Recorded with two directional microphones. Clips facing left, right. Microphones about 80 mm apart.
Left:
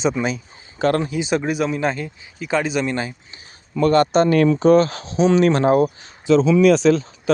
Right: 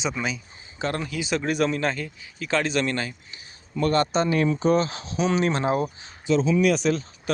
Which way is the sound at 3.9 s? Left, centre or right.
Left.